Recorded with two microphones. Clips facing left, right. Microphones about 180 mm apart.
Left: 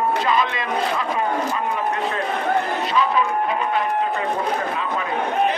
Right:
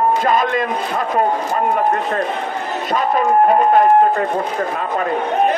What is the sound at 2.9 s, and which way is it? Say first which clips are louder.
Speech: right 6 dB; 50° right (ahead or behind).